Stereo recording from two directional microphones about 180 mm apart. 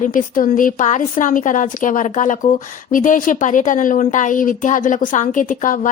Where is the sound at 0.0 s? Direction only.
45° left (ahead or behind).